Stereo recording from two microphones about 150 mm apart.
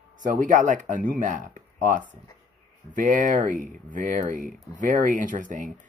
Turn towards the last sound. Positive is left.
turn(degrees=-60)  # may be behind; listen again after turning